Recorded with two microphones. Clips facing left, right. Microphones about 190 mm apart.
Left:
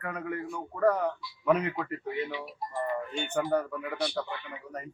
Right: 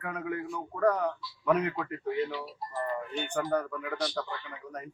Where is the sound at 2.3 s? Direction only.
15° left (ahead or behind).